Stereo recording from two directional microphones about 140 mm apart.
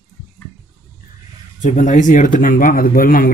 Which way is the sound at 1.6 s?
65° left (ahead or behind).